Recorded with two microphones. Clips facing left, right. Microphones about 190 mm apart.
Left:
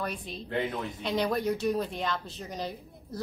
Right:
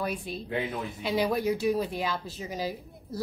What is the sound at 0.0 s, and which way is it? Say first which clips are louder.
A woman's voice: right 3 dB; 10° right (ahead or behind).